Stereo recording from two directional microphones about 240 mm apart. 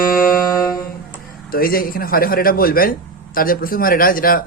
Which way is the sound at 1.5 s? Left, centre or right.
Left.